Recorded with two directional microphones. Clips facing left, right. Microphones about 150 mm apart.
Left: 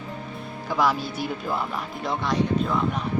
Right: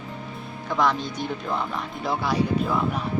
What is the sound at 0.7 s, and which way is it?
Speech, 5° left (ahead or behind).